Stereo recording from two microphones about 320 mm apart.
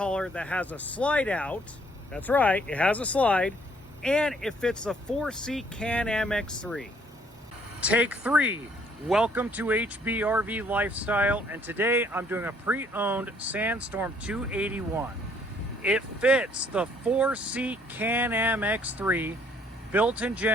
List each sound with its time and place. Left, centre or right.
0.0 s speech: centre